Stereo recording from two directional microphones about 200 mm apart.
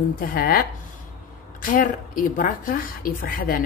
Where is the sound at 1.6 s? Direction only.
45° left (ahead or behind).